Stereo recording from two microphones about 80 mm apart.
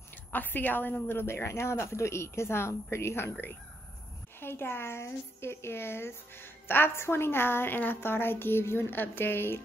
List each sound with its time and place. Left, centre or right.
0.3 s a woman's voice: left